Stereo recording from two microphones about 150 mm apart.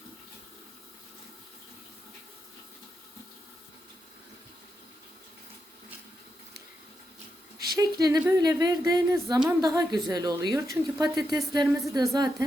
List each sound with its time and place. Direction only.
7.8 s speech: 25° right (ahead or behind)